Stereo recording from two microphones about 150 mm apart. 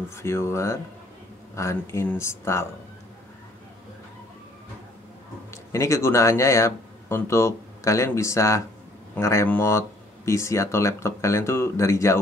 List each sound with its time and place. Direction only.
0.1 s speech: 15° left (ahead or behind)
5.7 s speech: 20° left (ahead or behind)